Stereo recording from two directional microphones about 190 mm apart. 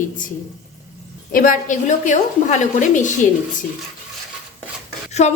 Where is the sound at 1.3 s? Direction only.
45° left (ahead or behind).